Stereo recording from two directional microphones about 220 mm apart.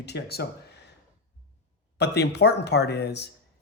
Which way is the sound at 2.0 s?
50° left (ahead or behind).